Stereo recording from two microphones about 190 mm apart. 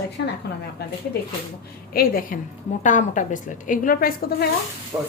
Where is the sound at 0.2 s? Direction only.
70° left (ahead or behind).